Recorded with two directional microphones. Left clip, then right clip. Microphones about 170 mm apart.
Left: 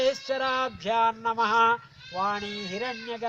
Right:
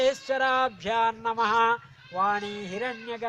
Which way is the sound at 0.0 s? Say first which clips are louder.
Right 2 dB; 20° right (ahead or behind).